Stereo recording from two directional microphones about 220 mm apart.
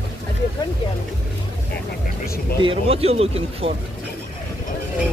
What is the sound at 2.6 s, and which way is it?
Speech, 25° right (ahead or behind).